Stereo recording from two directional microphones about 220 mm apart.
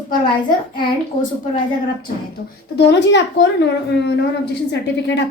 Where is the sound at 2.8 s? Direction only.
50° left (ahead or behind).